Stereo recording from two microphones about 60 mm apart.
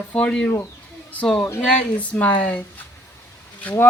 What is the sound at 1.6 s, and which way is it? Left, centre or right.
Speech, left.